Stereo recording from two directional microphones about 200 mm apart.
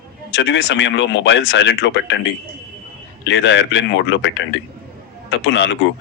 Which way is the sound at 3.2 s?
65° left (ahead or behind).